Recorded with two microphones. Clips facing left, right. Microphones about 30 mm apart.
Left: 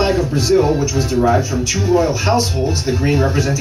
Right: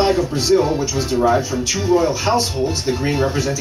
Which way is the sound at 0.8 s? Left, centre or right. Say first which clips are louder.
Left 3 dB; right.